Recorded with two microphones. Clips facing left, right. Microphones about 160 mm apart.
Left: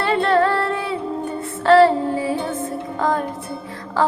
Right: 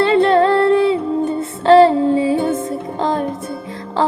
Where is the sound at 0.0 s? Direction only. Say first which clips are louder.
Right 5 dB; 20° right (ahead or behind).